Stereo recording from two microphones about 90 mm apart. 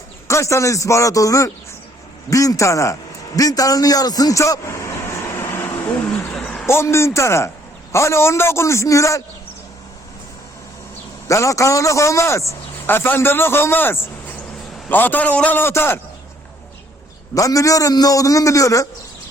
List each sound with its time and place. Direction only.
0.3 s a man's voice: 35° left (ahead or behind)
3.3 s vehicle: 40° left (ahead or behind); by 6.0 s 25° left (ahead or behind)
6.7 s a man's voice: 30° left (ahead or behind)
11.3 s a man's voice: 35° left (ahead or behind)
17.3 s a man's voice: 40° left (ahead or behind)